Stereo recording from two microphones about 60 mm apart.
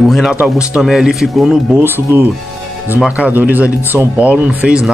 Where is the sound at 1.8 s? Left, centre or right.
Right.